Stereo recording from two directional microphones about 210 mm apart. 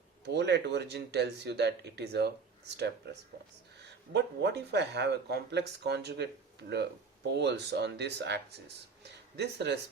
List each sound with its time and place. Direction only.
0.3 s speech: 55° right (ahead or behind)